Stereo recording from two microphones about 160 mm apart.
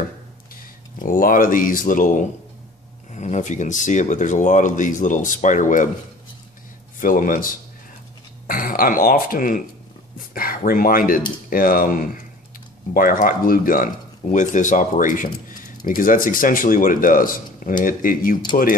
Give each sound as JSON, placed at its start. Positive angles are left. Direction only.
{"t": 0.9, "sound": "speech", "side_deg": 60}
{"t": 7.0, "sound": "speech", "side_deg": 60}